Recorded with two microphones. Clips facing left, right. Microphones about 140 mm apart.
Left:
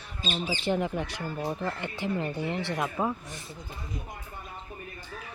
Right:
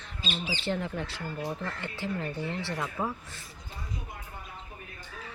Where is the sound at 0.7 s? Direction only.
15° left (ahead or behind).